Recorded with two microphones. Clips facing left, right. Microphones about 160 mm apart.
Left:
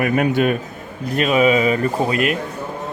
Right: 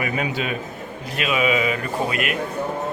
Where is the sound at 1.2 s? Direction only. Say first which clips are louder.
Left 6 dB; 40° left (ahead or behind).